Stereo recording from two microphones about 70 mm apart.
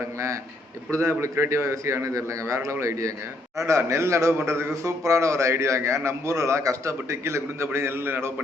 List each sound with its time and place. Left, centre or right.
0.9 s a man's voice: right